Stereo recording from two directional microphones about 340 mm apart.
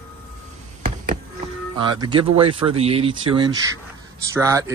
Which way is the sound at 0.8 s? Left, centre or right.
Right.